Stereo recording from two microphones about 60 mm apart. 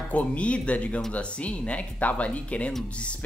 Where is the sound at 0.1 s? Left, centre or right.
Left.